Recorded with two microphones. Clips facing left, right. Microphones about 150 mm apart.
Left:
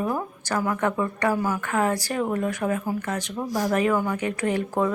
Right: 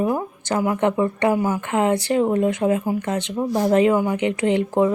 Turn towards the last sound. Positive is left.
turn(degrees=-20)  # may be behind; listen again after turning